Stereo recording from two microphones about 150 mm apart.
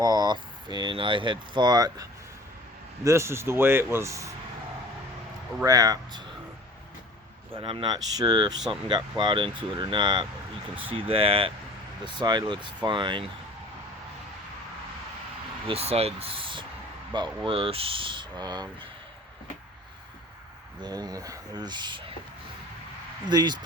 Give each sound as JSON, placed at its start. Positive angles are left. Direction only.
{"t": 0.0, "sound": "speech", "side_deg": -25}
{"t": 5.6, "sound": "speech", "side_deg": -25}
{"t": 7.6, "sound": "speech", "side_deg": -35}
{"t": 15.6, "sound": "speech", "side_deg": -40}
{"t": 20.8, "sound": "speech", "side_deg": -25}
{"t": 23.3, "sound": "speech", "side_deg": -30}